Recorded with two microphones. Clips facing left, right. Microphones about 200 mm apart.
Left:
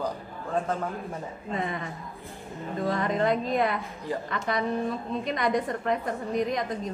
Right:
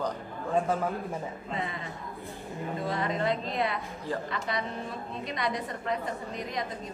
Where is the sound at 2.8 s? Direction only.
50° left (ahead or behind).